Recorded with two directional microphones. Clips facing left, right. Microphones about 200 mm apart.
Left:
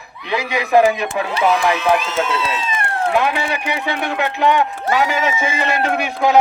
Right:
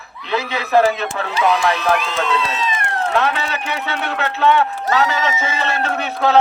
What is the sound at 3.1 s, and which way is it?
A man's voice, 15° left (ahead or behind).